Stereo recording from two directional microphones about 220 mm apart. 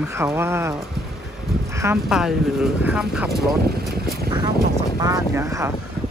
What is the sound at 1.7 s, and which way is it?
Speech, 10° right (ahead or behind).